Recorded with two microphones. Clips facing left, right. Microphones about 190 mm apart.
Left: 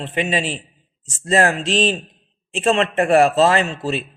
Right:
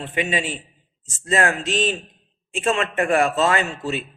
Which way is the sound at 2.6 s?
35° left (ahead or behind).